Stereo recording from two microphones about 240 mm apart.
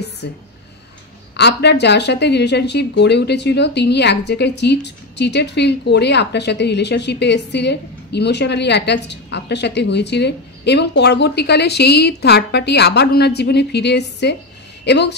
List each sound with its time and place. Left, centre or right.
0.2 s speech: left